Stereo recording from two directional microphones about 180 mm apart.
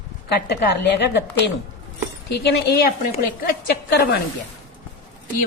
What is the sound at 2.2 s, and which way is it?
Speech, 65° left (ahead or behind).